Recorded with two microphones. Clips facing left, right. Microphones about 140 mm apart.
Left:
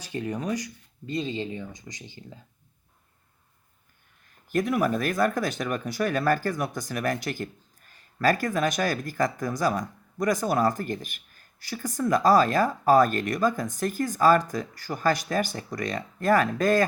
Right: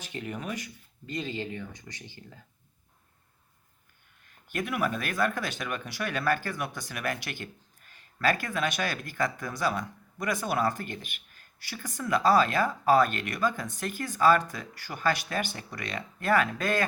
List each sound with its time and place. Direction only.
0.1 s speech: 30° left (ahead or behind)
1.1 s speech: 25° left (ahead or behind)
4.4 s speech: 40° left (ahead or behind)